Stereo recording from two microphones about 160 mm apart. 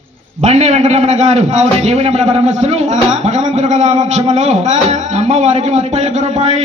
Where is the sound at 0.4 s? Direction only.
45° right (ahead or behind).